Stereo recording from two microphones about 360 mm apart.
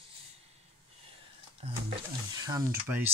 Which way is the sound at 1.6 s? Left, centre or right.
Centre.